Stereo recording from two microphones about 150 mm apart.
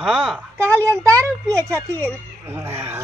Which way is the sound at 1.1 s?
20° right (ahead or behind).